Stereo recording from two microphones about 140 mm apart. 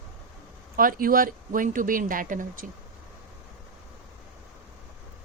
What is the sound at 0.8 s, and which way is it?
Speech, 90° right.